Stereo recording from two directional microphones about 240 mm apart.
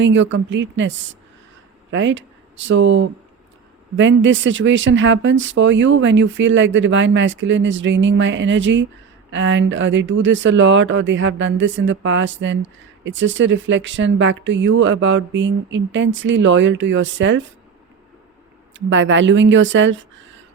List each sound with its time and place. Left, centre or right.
0.0 s speech: right
18.7 s speech: right